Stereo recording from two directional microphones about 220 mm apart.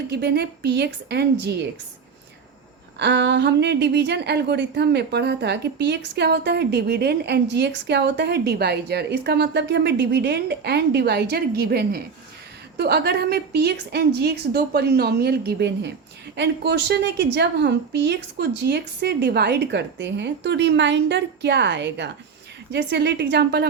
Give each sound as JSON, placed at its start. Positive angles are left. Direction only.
{"t": 0.1, "sound": "a woman's voice", "side_deg": -50}
{"t": 3.0, "sound": "a woman's voice", "side_deg": -55}